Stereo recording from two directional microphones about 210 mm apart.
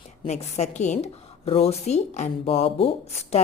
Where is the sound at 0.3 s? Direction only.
30° left (ahead or behind).